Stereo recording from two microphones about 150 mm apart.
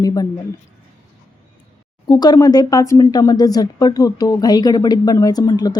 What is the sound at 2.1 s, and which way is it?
A woman's voice, 30° left (ahead or behind).